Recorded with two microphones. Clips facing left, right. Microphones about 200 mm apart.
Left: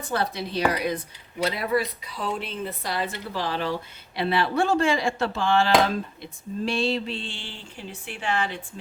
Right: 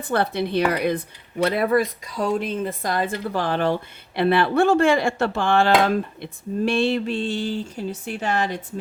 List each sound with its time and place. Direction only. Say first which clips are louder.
0.1 s speech: right 6 dB; 60° right (ahead or behind); by 8.6 s 40° right (ahead or behind)